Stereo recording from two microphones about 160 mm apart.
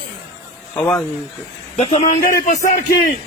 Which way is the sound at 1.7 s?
40° left (ahead or behind).